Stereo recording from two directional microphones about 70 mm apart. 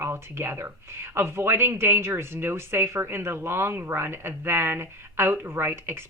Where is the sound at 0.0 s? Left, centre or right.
Right.